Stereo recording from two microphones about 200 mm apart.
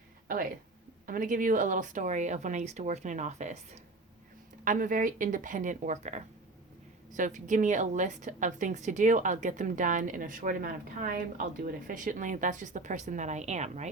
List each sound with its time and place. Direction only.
1.0 s a woman's voice: 45° right (ahead or behind)